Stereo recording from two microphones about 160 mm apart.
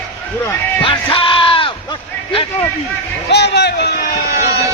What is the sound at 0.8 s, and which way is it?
Music, 30° left (ahead or behind).